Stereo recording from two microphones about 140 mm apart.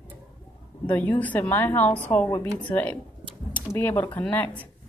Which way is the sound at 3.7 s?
15° left (ahead or behind).